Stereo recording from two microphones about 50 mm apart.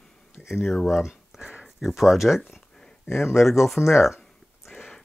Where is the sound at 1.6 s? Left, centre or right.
Centre.